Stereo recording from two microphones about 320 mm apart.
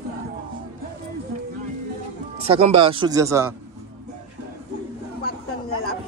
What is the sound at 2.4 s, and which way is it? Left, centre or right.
Speech, centre.